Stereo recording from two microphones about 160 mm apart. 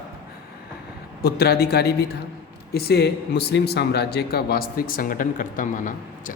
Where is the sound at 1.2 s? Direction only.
80° left.